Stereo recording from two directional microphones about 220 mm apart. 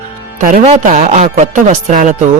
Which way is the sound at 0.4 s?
35° right (ahead or behind).